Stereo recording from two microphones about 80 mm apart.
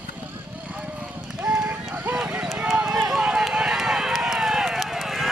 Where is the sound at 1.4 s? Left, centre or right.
Centre.